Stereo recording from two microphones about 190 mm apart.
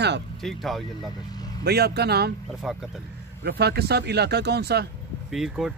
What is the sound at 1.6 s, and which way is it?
Speech, 55° right (ahead or behind).